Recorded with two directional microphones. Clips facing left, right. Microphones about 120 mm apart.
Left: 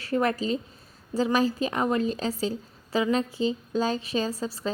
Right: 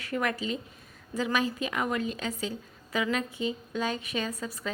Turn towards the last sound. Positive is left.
turn(degrees=30)  # may be behind; listen again after turning